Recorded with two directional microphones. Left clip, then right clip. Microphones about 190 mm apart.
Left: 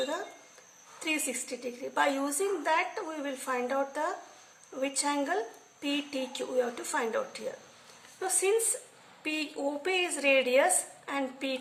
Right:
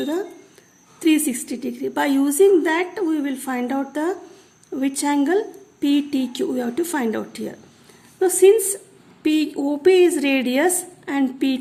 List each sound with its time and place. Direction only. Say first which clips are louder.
0.9 s a woman's voice: right 13 dB; 50° right (ahead or behind)